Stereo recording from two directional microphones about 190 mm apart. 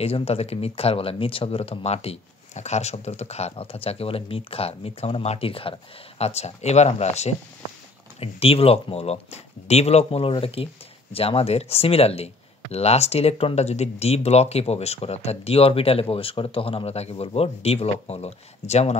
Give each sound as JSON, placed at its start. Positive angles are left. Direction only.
{"t": 0.0, "sound": "speech", "side_deg": 30}